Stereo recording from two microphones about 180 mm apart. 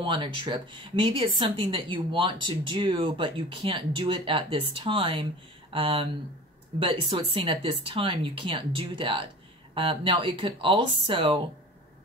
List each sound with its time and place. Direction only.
0.0 s a woman's voice: 25° right (ahead or behind)